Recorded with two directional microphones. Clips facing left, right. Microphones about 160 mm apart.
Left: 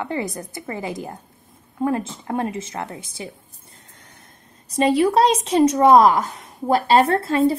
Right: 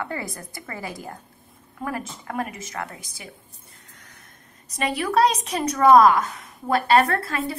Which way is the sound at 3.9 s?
30° left (ahead or behind).